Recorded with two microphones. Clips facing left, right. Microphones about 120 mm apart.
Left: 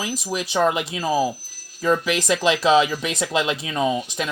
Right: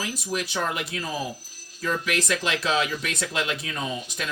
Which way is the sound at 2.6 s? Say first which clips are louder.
Left 8 dB; 90° left.